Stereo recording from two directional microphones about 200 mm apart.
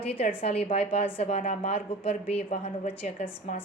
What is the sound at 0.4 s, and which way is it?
A woman's voice, 30° left (ahead or behind).